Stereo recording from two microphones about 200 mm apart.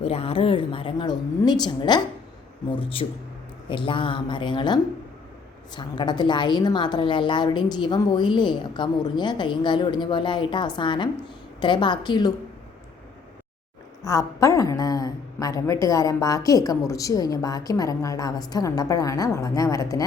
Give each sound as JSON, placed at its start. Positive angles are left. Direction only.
{"t": 0.0, "sound": "a woman's voice", "side_deg": 30}
{"t": 14.0, "sound": "a woman's voice", "side_deg": 15}